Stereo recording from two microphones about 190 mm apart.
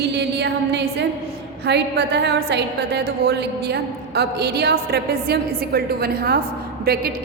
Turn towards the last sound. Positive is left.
turn(degrees=-55)  # may be behind; listen again after turning